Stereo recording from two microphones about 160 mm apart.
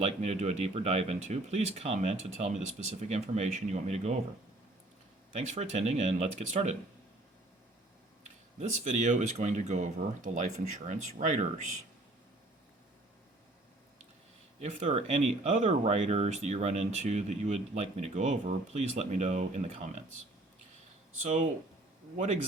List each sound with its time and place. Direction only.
0.0 s speech: 45° right (ahead or behind)
5.5 s speech: 45° right (ahead or behind)
8.5 s speech: 50° right (ahead or behind)
14.6 s speech: 45° right (ahead or behind)
21.2 s speech: 50° right (ahead or behind)